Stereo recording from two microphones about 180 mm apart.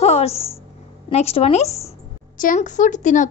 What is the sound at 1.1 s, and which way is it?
Speech, 35° left (ahead or behind).